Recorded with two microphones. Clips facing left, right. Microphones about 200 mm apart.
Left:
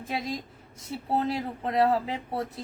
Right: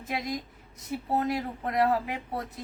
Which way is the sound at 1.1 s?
30° left (ahead or behind).